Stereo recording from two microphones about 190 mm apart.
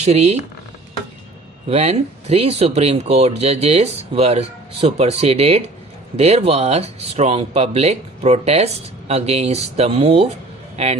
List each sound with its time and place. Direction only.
0.0 s speech: 35° right (ahead or behind)
1.6 s speech: 30° right (ahead or behind)